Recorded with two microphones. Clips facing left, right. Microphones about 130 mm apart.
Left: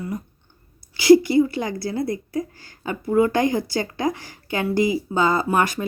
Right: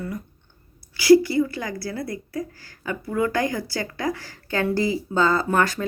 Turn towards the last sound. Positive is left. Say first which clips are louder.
# left 1 dB
turn(degrees=15)  # may be behind; listen again after turning